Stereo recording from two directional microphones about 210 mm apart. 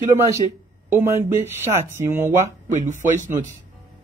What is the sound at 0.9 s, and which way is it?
Speech, 10° right (ahead or behind).